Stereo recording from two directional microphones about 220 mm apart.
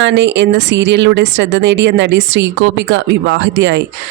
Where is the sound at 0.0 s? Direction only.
55° right (ahead or behind).